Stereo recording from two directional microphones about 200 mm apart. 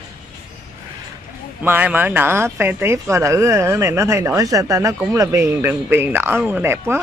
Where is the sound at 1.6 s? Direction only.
10° right (ahead or behind).